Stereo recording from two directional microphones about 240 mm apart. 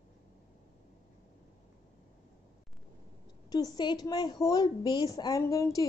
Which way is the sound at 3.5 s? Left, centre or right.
Centre.